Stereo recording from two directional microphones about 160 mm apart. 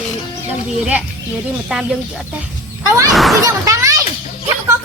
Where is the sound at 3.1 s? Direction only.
Centre (ahead or behind).